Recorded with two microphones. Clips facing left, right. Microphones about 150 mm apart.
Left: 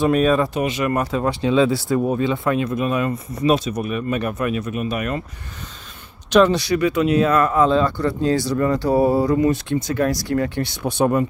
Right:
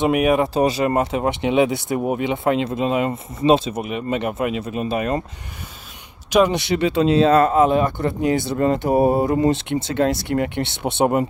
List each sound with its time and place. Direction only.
0.0 s speech: 15° right (ahead or behind)
0.6 s speech: 35° right (ahead or behind)
6.5 s speech: 25° right (ahead or behind)